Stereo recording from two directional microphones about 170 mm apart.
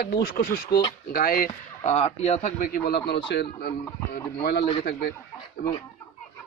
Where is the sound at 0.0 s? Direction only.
60° left (ahead or behind).